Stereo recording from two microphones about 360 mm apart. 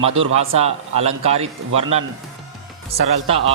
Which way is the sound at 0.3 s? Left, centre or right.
Centre.